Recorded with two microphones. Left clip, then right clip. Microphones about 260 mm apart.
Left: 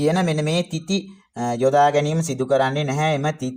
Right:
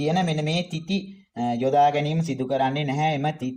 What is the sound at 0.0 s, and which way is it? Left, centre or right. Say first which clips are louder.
Speech: left 4 dB; left.